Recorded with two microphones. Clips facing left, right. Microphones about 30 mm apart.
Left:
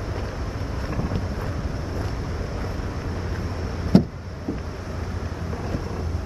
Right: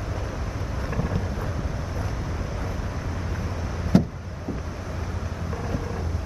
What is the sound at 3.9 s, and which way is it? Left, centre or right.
Vehicle, left.